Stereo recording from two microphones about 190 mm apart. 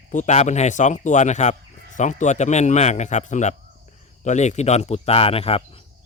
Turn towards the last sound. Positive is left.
turn(degrees=30)  # may be behind; listen again after turning